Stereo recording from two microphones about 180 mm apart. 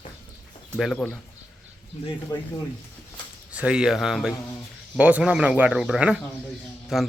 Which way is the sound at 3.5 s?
5° right (ahead or behind).